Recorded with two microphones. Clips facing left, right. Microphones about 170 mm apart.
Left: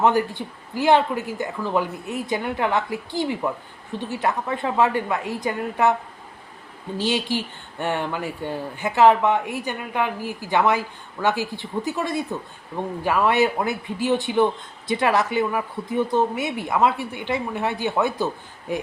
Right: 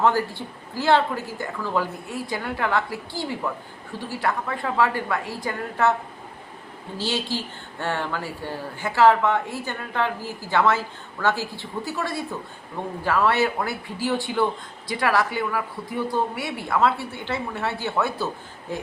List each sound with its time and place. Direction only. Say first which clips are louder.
0.0 s a man's voice: left 2 dB; 20° left (ahead or behind)
6.9 s a man's voice: left 4 dB; 15° left (ahead or behind)